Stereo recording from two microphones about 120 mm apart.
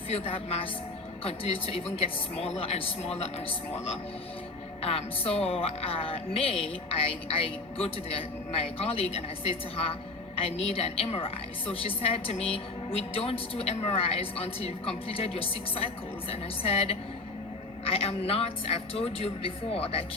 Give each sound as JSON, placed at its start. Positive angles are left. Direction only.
{"t": 0.1, "sound": "a woman's voice", "side_deg": 55}
{"t": 4.8, "sound": "a woman's voice", "side_deg": 55}
{"t": 10.3, "sound": "a woman's voice", "side_deg": 55}